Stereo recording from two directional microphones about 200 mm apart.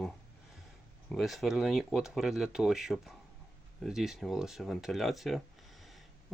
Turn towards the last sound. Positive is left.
turn(degrees=0)  # may be behind; listen again after turning